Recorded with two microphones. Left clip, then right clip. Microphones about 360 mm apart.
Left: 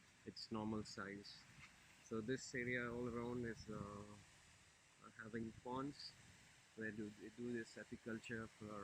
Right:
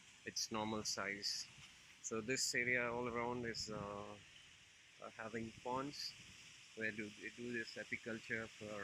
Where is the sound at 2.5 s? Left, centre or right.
Right.